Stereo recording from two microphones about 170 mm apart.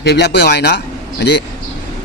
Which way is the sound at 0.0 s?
80° left.